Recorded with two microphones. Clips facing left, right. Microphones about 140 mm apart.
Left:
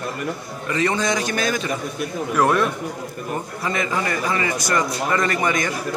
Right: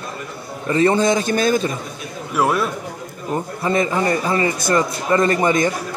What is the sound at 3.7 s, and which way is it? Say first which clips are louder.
A man's voice: right 6 dB; 30° right (ahead or behind).